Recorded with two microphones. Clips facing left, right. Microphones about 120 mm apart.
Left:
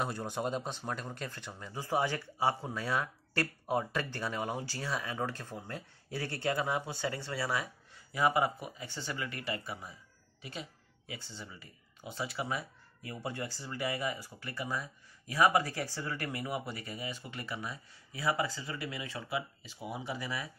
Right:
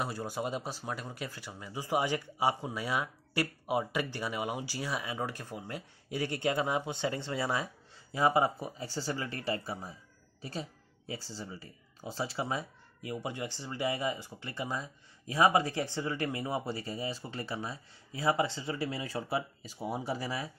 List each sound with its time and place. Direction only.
0.0 s speech: 5° right (ahead or behind); by 20.4 s 35° right (ahead or behind)